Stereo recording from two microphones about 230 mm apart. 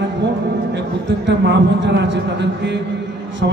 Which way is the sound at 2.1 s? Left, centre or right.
Right.